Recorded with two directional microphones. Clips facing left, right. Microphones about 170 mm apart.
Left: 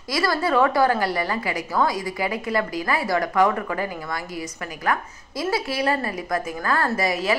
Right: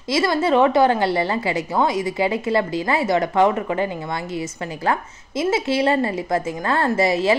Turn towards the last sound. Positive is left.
turn(degrees=-25)  # may be behind; listen again after turning